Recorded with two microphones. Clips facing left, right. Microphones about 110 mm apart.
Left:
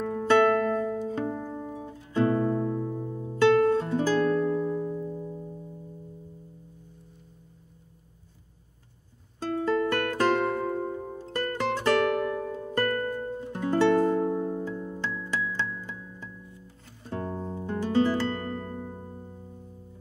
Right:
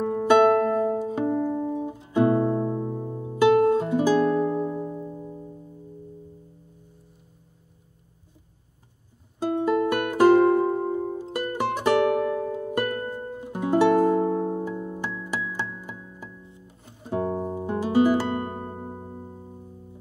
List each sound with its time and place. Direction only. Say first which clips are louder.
0.0 s music: right 4 dB; 20° right (ahead or behind)
9.4 s music: right 4 dB; 15° right (ahead or behind)
18.6 s music: right 2 dB; 35° right (ahead or behind)